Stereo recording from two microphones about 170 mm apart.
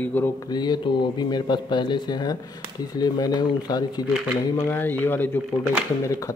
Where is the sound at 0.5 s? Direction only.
25° left (ahead or behind).